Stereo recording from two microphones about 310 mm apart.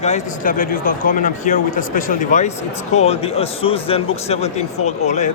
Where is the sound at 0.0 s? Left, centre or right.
Left.